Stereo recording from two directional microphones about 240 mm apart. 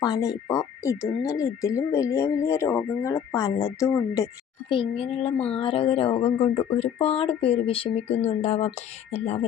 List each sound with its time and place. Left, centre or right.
0.0 s speech: centre